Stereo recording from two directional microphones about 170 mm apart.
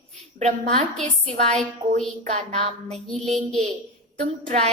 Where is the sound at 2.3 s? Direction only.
40° right (ahead or behind).